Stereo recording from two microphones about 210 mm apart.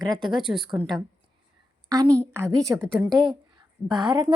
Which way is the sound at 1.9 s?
15° right (ahead or behind).